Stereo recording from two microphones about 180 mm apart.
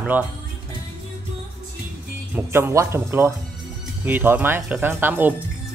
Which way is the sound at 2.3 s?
15° right (ahead or behind).